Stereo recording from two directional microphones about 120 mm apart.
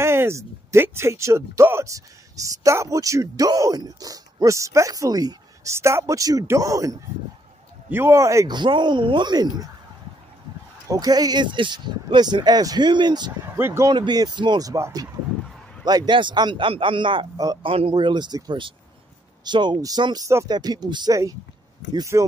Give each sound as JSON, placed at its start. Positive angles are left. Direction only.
{"t": 0.0, "sound": "speech", "side_deg": -20}
{"t": 8.5, "sound": "speech", "side_deg": -40}
{"t": 10.9, "sound": "speech", "side_deg": -30}
{"t": 13.6, "sound": "speech", "side_deg": -20}
{"t": 13.8, "sound": "a man's voice", "side_deg": -35}
{"t": 21.9, "sound": "speech", "side_deg": -25}